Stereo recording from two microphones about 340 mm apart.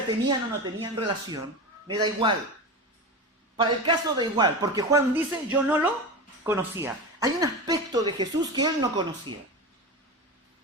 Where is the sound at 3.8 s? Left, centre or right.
Centre.